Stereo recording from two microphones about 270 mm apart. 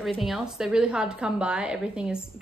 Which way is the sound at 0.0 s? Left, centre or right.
Centre.